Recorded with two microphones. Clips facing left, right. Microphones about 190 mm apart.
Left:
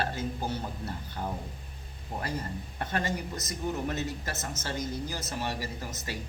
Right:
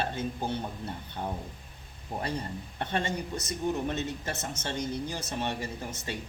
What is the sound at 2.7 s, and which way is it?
Speech, 25° right (ahead or behind).